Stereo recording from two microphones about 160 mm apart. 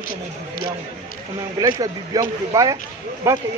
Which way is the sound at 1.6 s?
25° right (ahead or behind).